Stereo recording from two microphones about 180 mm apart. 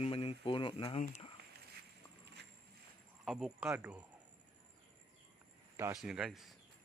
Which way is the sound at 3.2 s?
5° right (ahead or behind).